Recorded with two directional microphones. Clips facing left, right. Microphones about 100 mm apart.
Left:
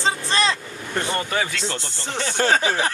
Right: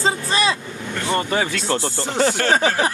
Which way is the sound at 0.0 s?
10° right (ahead or behind).